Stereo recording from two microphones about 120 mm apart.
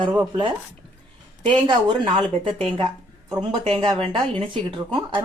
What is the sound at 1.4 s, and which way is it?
Speech, 40° right (ahead or behind).